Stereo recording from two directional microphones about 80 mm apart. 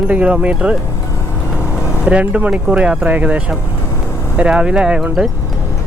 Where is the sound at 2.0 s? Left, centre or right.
Centre.